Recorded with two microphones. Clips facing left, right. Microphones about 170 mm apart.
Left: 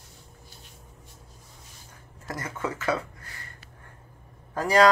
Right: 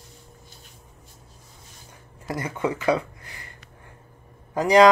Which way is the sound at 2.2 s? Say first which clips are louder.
Right 6 dB; 15° right (ahead or behind).